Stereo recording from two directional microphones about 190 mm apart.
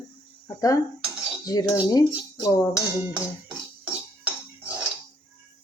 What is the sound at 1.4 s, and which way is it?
Cutlery, 20° left (ahead or behind).